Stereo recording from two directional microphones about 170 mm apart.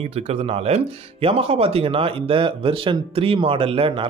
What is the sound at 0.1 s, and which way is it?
Speech, 40° right (ahead or behind).